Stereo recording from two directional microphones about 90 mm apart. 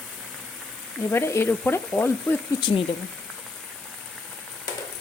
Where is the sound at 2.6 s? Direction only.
65° left (ahead or behind).